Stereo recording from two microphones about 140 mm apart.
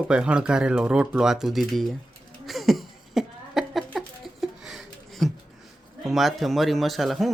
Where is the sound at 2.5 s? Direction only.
Centre (ahead or behind).